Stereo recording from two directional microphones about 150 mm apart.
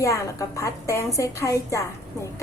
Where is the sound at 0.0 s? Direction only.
20° left (ahead or behind).